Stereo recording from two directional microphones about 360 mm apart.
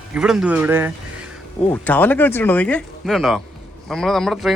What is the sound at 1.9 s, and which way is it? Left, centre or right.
Speech, centre.